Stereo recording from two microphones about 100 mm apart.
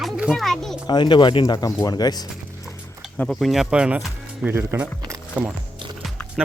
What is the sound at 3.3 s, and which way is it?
Speech, centre (ahead or behind).